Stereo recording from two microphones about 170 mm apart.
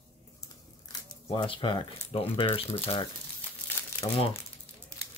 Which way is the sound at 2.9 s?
35° left (ahead or behind).